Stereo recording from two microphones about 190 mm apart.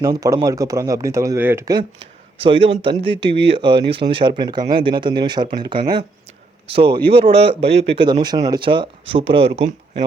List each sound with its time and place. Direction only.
0.0 s speech: 15° right (ahead or behind)
2.0 s speech: 30° right (ahead or behind)
3.0 s speech: 65° right (ahead or behind)
3.5 s speech: 25° right (ahead or behind)